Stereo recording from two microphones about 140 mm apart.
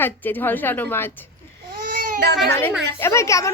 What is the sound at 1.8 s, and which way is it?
Baby cry, 70° right (ahead or behind).